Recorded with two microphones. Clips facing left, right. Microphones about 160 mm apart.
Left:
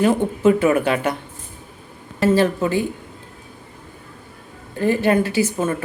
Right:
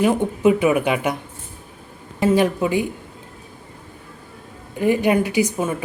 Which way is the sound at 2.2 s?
15° right (ahead or behind).